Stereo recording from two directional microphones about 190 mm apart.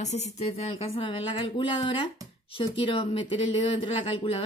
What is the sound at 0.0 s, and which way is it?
A woman's voice, 35° left (ahead or behind).